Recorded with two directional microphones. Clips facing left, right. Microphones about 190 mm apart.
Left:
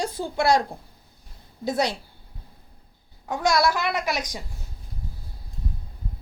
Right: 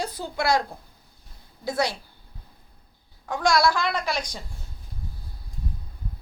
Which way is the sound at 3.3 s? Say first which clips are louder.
Even; 15° left (ahead or behind).